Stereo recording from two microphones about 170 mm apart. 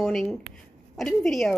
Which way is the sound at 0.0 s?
Centre (ahead or behind).